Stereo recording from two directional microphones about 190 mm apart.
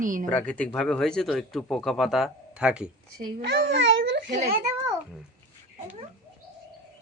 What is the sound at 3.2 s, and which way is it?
A child's voice, 60° right (ahead or behind).